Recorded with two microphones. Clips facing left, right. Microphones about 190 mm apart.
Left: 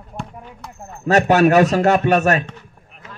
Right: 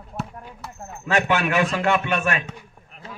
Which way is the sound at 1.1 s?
40° left (ahead or behind).